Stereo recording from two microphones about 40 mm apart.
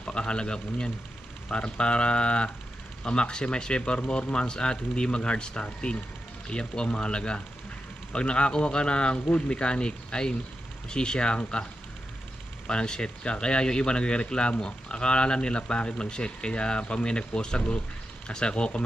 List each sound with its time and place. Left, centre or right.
0.0 s a man's voice: left
12.6 s speech: left